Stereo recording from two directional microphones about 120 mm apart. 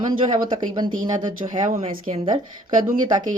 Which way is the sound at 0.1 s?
40° right (ahead or behind).